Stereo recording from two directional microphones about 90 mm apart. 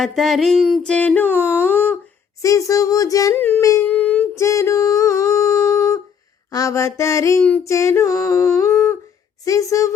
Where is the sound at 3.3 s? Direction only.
20° left (ahead or behind).